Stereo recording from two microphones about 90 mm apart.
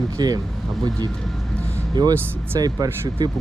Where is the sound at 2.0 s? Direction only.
50° right (ahead or behind).